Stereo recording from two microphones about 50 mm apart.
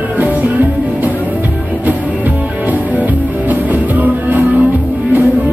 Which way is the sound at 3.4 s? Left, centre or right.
Right.